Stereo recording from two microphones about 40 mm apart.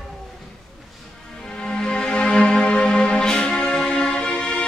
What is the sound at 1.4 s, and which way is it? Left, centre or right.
Music, left.